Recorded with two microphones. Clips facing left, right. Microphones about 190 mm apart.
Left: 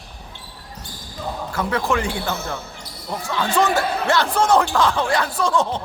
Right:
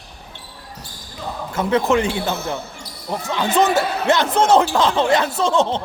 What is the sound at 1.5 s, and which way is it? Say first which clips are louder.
Speech: right 5 dB; 20° right (ahead or behind).